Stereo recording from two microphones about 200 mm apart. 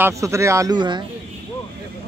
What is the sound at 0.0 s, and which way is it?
Speech, 15° right (ahead or behind).